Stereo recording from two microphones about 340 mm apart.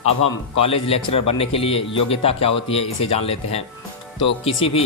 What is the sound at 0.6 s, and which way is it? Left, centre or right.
Speech, centre.